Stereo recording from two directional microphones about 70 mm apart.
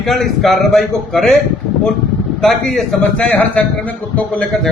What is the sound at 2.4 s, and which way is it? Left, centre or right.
Speech, centre.